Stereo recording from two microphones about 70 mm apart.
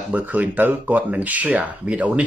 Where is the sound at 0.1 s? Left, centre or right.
Right.